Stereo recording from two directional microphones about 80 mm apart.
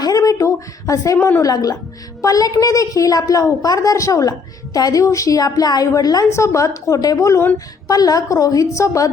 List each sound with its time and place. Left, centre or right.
0.0 s a sound: left
1.4 s a woman's voice: left
6.3 s a woman's voice: left